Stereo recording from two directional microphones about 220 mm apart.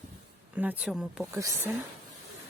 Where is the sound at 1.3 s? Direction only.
15° right (ahead or behind).